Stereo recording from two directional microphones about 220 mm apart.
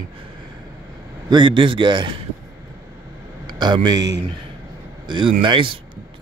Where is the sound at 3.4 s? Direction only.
20° right (ahead or behind).